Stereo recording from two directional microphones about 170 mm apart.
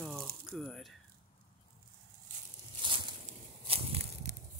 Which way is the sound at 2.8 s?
30° right (ahead or behind).